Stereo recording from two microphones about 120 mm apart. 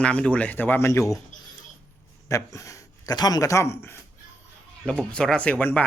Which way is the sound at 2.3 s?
25° left (ahead or behind).